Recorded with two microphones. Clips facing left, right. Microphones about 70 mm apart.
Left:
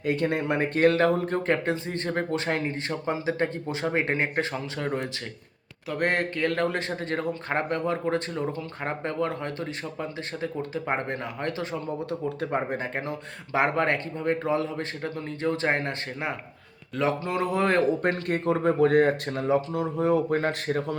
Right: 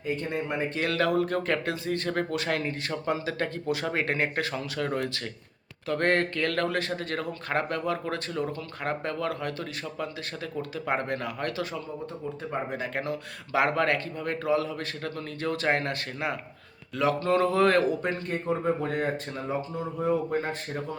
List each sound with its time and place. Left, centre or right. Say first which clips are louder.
0.0 s speech: left 5 dB; left
0.8 s speech: left 5 dB; left
12.4 s speech: left 3 dB; left
12.8 s a man's voice: even; left
17.2 s speech: right 3 dB; centre
18.0 s speech: left 4 dB; left